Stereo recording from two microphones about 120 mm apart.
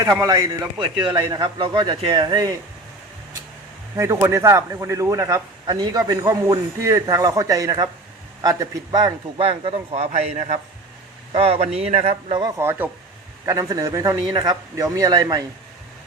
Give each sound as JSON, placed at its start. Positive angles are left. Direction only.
{"t": 0.0, "sound": "speech", "side_deg": -30}
{"t": 3.9, "sound": "a man's voice", "side_deg": -25}
{"t": 9.4, "sound": "a man's voice", "side_deg": -50}
{"t": 11.3, "sound": "a man's voice", "side_deg": -55}
{"t": 12.3, "sound": "speech", "side_deg": -35}
{"t": 12.5, "sound": "a man's voice", "side_deg": -20}